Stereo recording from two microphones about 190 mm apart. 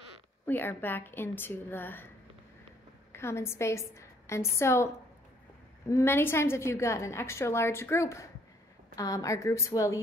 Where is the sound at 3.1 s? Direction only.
15° left (ahead or behind).